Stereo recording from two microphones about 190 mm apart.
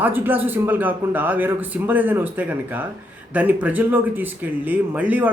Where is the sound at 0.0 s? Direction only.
10° right (ahead or behind).